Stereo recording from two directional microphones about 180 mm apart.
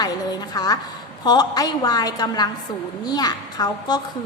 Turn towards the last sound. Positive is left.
turn(degrees=20)  # may be behind; listen again after turning